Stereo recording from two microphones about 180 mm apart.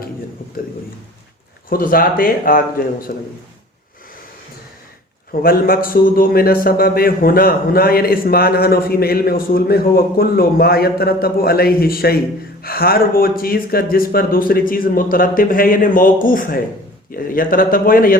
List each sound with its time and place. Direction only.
1.7 s speech: 50° left (ahead or behind)
5.3 s a man's voice: 55° left (ahead or behind)